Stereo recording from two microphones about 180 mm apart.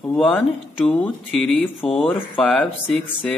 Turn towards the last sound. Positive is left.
turn(degrees=5)  # may be behind; listen again after turning